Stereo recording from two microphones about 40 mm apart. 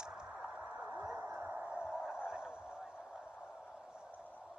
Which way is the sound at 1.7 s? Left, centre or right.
Right.